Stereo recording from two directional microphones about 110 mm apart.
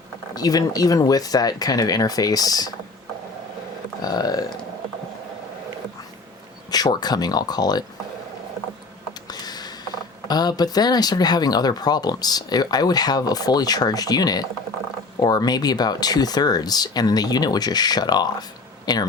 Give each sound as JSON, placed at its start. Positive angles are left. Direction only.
{"t": 0.3, "sound": "speech", "side_deg": 35}
{"t": 4.0, "sound": "speech", "side_deg": 35}
{"t": 6.7, "sound": "speech", "side_deg": 35}
{"t": 9.2, "sound": "a sound", "side_deg": 40}
{"t": 10.2, "sound": "speech", "side_deg": 40}